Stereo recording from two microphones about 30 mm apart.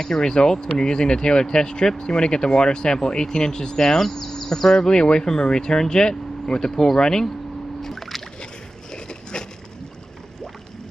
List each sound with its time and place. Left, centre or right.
0.0 s speech: left
4.0 s speech: centre
4.5 s speech: centre
7.8 s a sound: centre